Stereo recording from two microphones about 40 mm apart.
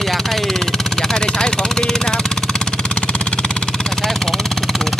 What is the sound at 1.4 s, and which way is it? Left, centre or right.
Vehicle, centre.